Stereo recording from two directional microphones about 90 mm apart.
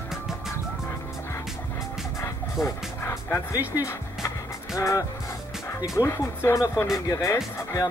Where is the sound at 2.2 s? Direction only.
30° left (ahead or behind).